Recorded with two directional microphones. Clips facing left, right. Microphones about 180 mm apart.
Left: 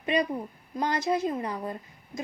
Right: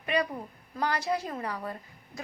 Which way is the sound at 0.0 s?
20° left (ahead or behind).